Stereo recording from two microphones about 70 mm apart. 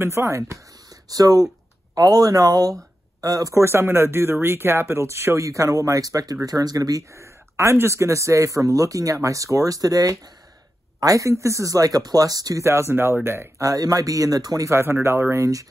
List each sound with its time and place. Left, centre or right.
0.0 s speech: right
1.0 s speech: right
3.5 s speech: right
7.2 s speech: right
12.6 s speech: right
13.6 s speech: right
14.7 s speech: right